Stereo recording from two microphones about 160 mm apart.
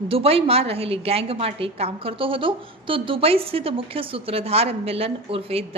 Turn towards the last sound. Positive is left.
turn(degrees=-35)  # may be behind; listen again after turning